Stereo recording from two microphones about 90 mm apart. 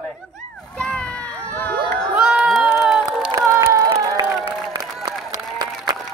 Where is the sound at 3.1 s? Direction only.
40° right (ahead or behind).